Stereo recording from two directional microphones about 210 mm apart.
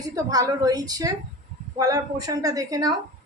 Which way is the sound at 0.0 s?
15° right (ahead or behind).